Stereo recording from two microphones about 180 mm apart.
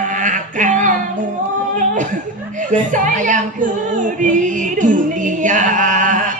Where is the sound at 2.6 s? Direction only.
45° right (ahead or behind).